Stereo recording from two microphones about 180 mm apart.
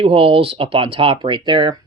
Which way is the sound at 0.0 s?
30° right (ahead or behind).